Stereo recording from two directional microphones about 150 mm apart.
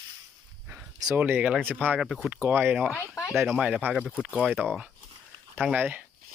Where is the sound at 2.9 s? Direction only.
20° left (ahead or behind).